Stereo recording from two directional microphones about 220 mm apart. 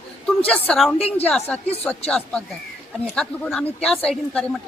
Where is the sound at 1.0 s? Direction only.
25° left (ahead or behind).